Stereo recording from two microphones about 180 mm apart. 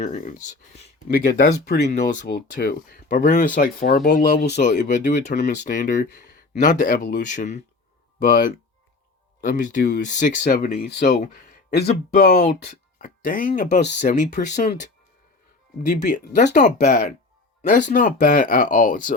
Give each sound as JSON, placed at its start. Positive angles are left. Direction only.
{"t": 0.0, "sound": "speech", "side_deg": 45}
{"t": 1.9, "sound": "speech", "side_deg": 45}
{"t": 4.0, "sound": "speech", "side_deg": 60}
{"t": 4.5, "sound": "speech", "side_deg": 45}
{"t": 11.7, "sound": "speech", "side_deg": 65}
{"t": 12.6, "sound": "speech", "side_deg": 50}
{"t": 15.9, "sound": "speech", "side_deg": 50}